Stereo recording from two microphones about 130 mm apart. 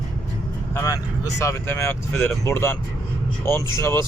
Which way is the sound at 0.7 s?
25° left (ahead or behind).